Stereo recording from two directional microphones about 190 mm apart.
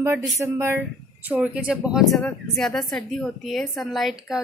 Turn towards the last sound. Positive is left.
turn(degrees=0)  # may be behind; listen again after turning